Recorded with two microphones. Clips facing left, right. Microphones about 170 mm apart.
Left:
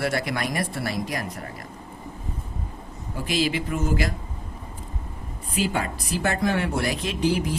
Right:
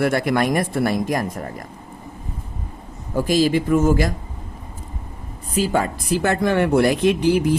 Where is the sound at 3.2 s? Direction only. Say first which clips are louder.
Right 8 dB; 40° right (ahead or behind).